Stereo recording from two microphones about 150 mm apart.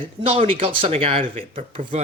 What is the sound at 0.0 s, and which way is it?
Speech, 40° right (ahead or behind).